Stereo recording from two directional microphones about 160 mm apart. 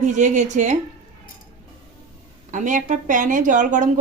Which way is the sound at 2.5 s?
50° right (ahead or behind).